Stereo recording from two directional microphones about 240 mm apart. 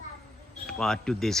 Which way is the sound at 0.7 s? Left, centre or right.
Centre.